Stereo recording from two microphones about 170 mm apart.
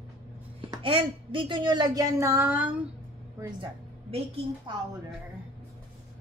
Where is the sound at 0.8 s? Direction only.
30° right (ahead or behind); by 2.7 s 10° right (ahead or behind).